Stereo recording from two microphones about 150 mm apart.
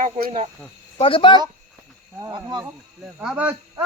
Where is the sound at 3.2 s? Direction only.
10° right (ahead or behind).